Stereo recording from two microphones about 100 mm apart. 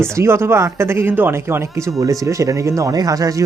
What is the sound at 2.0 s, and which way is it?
Speech, 35° right (ahead or behind).